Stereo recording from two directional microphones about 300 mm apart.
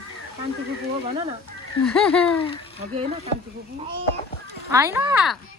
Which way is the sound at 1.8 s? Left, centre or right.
Centre.